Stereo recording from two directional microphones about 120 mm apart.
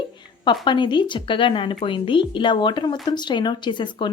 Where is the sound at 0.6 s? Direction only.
40° left (ahead or behind).